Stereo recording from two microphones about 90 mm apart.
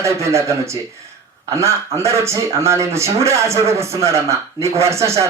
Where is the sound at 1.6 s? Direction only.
30° right (ahead or behind).